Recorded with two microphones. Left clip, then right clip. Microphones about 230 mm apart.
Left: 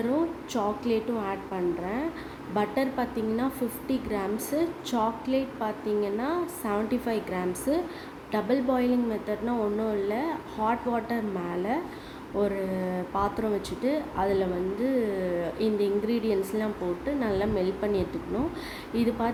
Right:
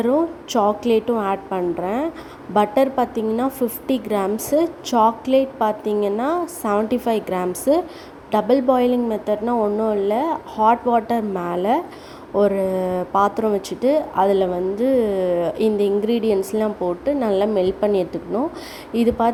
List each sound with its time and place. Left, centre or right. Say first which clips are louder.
0.1 s a woman's voice: right 9 dB; right